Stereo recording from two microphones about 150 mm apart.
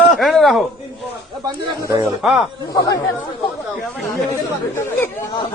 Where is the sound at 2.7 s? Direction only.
25° left (ahead or behind).